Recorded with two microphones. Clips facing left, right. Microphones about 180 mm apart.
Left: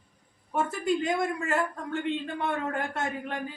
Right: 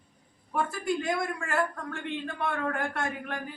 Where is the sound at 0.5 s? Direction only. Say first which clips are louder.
Left 2 dB; 20° left (ahead or behind).